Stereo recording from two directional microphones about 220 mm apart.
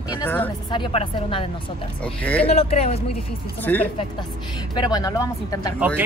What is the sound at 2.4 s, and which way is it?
Speech, 30° left (ahead or behind).